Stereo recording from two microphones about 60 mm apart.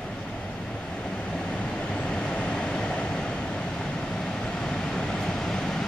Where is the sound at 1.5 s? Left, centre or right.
Centre.